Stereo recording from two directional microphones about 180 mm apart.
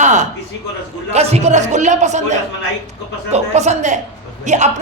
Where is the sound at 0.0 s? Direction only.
40° right (ahead or behind).